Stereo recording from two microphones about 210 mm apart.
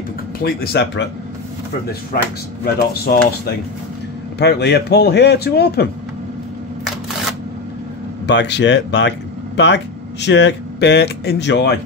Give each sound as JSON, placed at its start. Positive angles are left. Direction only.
{"t": 0.4, "sound": "speech", "side_deg": 45}
{"t": 2.1, "sound": "speech", "side_deg": 45}
{"t": 8.3, "sound": "speech", "side_deg": 55}
{"t": 10.2, "sound": "speech", "side_deg": 55}